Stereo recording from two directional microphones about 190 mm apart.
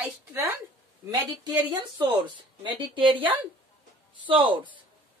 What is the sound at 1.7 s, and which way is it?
Speech, 25° right (ahead or behind).